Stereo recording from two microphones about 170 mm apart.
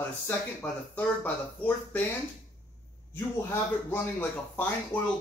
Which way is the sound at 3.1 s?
15° left (ahead or behind).